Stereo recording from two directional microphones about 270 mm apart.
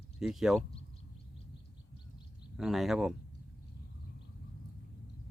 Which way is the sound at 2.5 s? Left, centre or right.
Centre.